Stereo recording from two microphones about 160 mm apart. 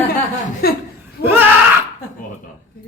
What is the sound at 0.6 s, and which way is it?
Speech, 70° left (ahead or behind).